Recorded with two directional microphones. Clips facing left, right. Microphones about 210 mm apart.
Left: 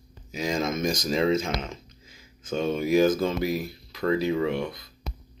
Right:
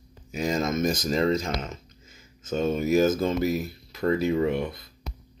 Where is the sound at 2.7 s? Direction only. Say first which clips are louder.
Left 1 dB; 45° right (ahead or behind).